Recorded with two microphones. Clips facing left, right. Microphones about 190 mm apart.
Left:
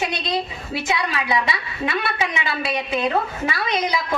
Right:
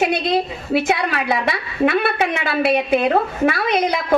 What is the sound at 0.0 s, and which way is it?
A man's voice, 55° right (ahead or behind).